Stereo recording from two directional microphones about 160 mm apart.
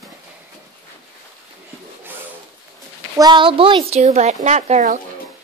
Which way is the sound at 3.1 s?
25° right (ahead or behind).